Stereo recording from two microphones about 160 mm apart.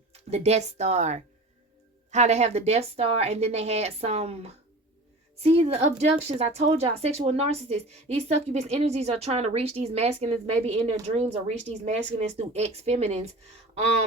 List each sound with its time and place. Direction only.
0.1 s speech: 40° right (ahead or behind)